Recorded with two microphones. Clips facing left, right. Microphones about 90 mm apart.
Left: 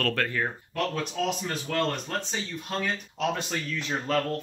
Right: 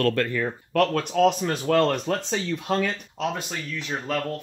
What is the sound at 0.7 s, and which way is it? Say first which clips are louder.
Speech: right 7 dB; 65° right (ahead or behind).